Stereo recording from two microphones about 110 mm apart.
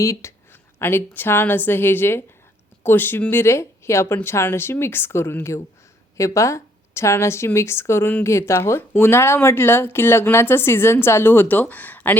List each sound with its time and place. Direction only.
0.0 s a woman's voice: 25° left (ahead or behind)